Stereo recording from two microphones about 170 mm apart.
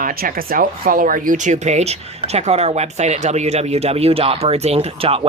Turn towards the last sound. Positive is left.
turn(degrees=-35)  # may be behind; listen again after turning